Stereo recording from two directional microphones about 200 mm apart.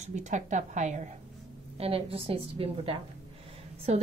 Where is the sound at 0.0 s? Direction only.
35° right (ahead or behind).